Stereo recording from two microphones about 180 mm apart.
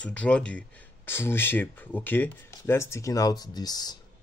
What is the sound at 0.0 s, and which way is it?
Speech, 5° left (ahead or behind).